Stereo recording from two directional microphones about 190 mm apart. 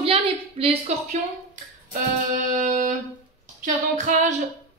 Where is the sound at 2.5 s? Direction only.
40° right (ahead or behind).